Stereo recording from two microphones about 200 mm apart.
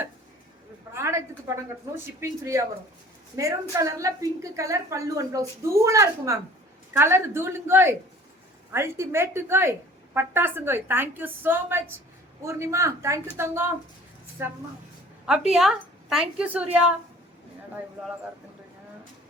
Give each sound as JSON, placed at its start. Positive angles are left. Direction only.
{"t": 0.9, "sound": "a woman's voice", "side_deg": -15}